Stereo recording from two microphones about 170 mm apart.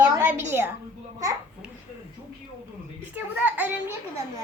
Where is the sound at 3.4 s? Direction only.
10° right (ahead or behind).